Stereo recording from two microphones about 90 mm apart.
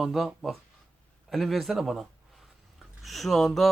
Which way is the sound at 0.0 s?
Centre (ahead or behind).